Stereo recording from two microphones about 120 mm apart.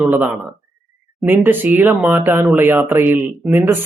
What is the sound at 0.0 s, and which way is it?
Speech, 15° right (ahead or behind).